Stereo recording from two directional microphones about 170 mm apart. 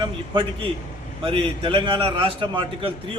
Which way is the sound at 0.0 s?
30° right (ahead or behind).